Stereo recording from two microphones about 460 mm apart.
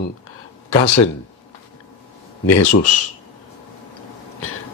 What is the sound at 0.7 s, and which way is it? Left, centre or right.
Speech, left.